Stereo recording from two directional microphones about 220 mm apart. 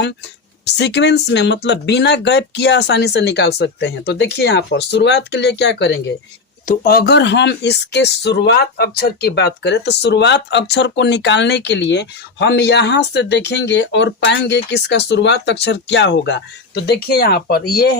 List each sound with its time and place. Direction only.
0.8 s speech: 50° left (ahead or behind)